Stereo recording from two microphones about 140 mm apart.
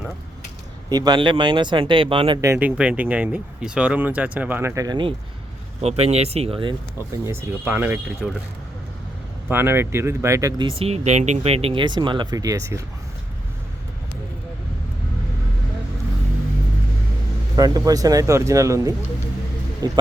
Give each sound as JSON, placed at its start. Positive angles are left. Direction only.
{"t": 0.9, "sound": "speech", "side_deg": -30}
{"t": 2.4, "sound": "speech", "side_deg": -20}
{"t": 2.6, "sound": "speech", "side_deg": -10}
{"t": 5.8, "sound": "speech", "side_deg": -50}
{"t": 7.3, "sound": "speech", "side_deg": -15}
{"t": 9.5, "sound": "speech", "side_deg": -15}
{"t": 10.7, "sound": "speech", "side_deg": -45}
{"t": 17.6, "sound": "speech", "side_deg": -25}